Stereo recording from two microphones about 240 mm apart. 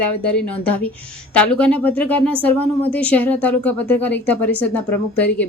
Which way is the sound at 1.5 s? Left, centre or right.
Centre.